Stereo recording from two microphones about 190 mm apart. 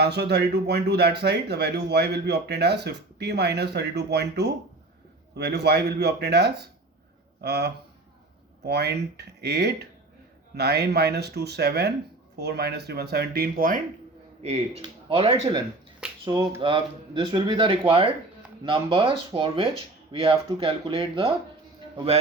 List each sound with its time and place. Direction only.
0.0 s speech: 60° right (ahead or behind)
14.4 s speech: 35° right (ahead or behind)